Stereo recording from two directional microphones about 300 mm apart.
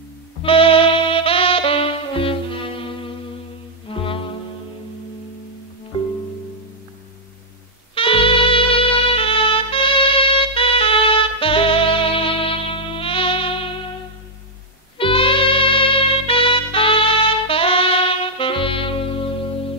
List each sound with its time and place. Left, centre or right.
0.4 s saxophone: centre
3.9 s music: centre
7.9 s music: centre
15.0 s music: centre